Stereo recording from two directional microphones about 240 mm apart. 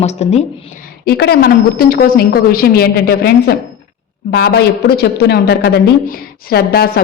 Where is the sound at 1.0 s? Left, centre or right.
Left.